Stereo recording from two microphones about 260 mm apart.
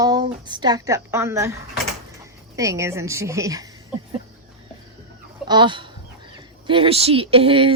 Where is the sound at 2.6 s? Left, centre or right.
Centre.